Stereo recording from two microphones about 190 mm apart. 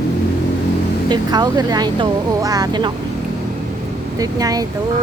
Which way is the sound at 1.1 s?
20° right (ahead or behind).